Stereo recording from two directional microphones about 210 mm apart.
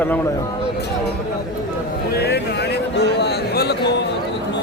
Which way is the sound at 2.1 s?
50° left (ahead or behind).